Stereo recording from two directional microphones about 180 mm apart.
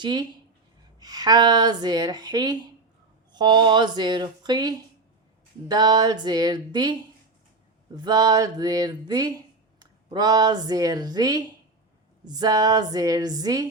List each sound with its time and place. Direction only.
0.0 s a woman's voice: 25° right (ahead or behind)
7.9 s a woman's voice: 20° right (ahead or behind)